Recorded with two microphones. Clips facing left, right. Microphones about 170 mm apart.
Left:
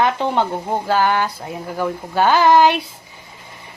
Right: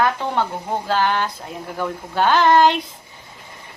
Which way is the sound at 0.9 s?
10° left (ahead or behind).